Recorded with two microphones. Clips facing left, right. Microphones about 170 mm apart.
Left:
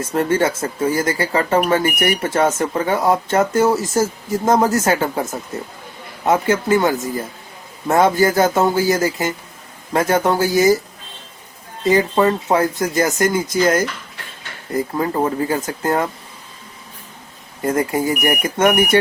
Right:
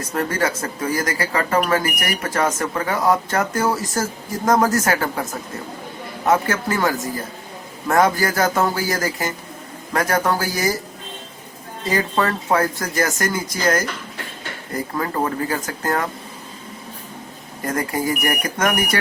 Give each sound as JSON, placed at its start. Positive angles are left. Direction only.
{"t": 0.0, "sound": "speech", "side_deg": 25}
{"t": 6.2, "sound": "speech", "side_deg": 20}
{"t": 11.9, "sound": "speech", "side_deg": 20}
{"t": 14.9, "sound": "speech", "side_deg": 20}
{"t": 17.6, "sound": "speech", "side_deg": 25}